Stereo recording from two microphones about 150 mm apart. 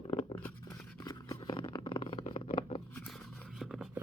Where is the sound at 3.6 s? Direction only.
Centre (ahead or behind).